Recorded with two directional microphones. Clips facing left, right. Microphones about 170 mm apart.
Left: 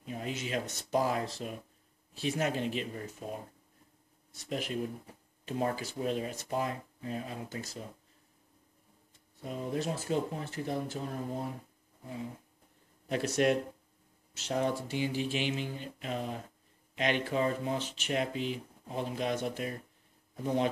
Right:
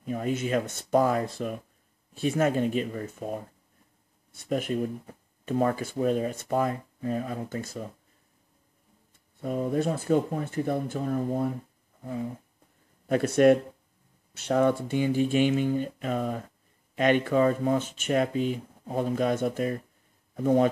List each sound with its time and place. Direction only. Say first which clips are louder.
0.0 s speech: right 9 dB; 50° right (ahead or behind)
9.4 s speech: right 8 dB; 50° right (ahead or behind)
13.1 s speech: right 8 dB; 50° right (ahead or behind)